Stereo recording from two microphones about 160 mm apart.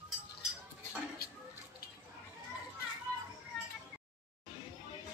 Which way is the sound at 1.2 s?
75° left (ahead or behind).